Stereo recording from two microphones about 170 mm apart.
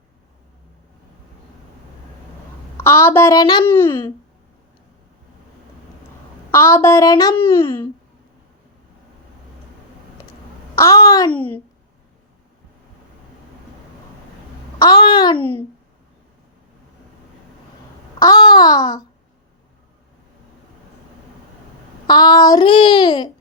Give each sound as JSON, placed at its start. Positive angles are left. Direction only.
{"t": 2.7, "sound": "a woman's voice", "side_deg": 15}
{"t": 3.7, "sound": "a woman's voice", "side_deg": 10}
{"t": 6.5, "sound": "a woman's voice", "side_deg": 15}
{"t": 10.8, "sound": "a child's voice", "side_deg": 20}
{"t": 11.3, "sound": "a woman's voice", "side_deg": 10}
{"t": 14.8, "sound": "a child's voice", "side_deg": 25}
{"t": 15.4, "sound": "a woman's voice", "side_deg": 10}
{"t": 18.3, "sound": "a child's voice", "side_deg": 25}
{"t": 22.0, "sound": "a child's voice", "side_deg": 25}